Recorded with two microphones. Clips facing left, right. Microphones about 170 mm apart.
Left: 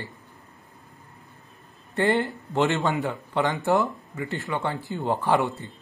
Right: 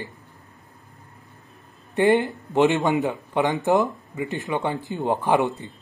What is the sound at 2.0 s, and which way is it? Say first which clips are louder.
Speech: right 4 dB; 15° right (ahead or behind).